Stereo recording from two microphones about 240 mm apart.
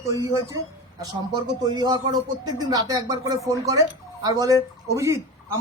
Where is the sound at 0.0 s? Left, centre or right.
Centre.